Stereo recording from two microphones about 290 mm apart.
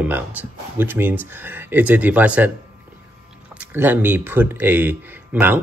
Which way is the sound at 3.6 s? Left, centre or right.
Centre.